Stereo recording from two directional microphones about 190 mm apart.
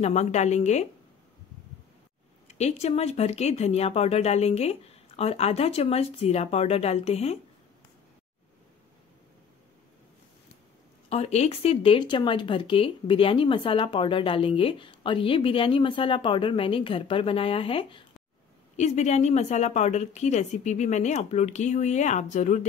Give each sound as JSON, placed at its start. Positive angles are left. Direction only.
{"t": 0.0, "sound": "speech", "side_deg": 35}
{"t": 2.4, "sound": "speech", "side_deg": 35}
{"t": 11.1, "sound": "speech", "side_deg": 35}